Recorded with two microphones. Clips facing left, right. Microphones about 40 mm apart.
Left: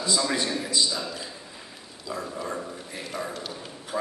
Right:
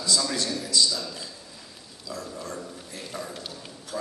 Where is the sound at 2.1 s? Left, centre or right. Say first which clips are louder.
Left 4 dB; left.